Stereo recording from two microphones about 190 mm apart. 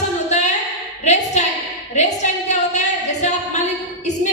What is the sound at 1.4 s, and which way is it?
Speech, 40° left (ahead or behind).